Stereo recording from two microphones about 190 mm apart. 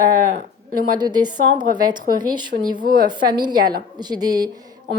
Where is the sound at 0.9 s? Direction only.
20° right (ahead or behind).